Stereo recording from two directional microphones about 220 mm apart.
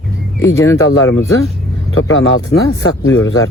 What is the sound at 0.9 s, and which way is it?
Speech, 65° left (ahead or behind).